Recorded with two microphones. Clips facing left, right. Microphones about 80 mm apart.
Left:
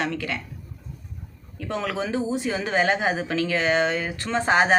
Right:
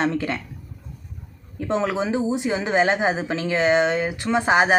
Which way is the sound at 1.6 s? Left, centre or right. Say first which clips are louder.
Right 5 dB; right.